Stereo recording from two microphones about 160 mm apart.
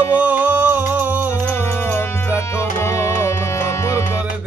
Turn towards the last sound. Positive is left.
turn(degrees=20)  # may be behind; listen again after turning